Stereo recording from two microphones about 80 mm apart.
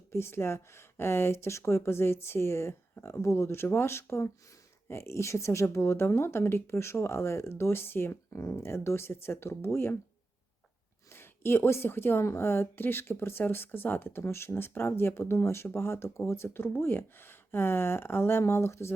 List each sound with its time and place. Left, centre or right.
0.1 s speech: left
11.1 s speech: left